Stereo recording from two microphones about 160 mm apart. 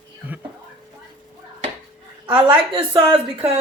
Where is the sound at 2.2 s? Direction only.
35° right (ahead or behind).